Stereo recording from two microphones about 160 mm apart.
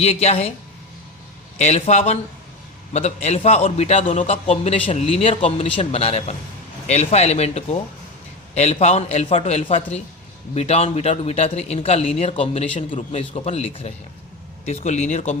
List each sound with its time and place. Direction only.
0.0 s speech: 40° left (ahead or behind)
1.5 s speech: 40° left (ahead or behind)